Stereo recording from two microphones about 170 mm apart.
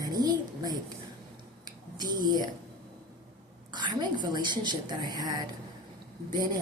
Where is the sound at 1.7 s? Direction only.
25° right (ahead or behind).